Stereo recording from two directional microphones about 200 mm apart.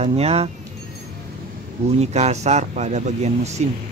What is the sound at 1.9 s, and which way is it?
Speech, 35° right (ahead or behind).